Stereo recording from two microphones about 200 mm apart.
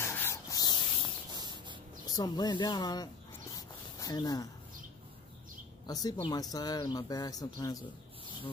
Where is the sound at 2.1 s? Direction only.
20° left (ahead or behind).